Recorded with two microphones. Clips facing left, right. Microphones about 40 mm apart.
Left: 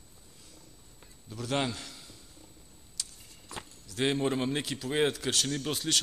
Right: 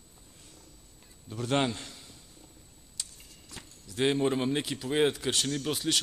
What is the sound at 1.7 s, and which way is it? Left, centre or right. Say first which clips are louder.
Speech: right 1 dB; right.